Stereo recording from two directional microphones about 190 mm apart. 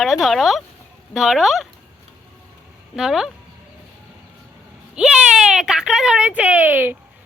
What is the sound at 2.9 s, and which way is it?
Speech, 5° right (ahead or behind).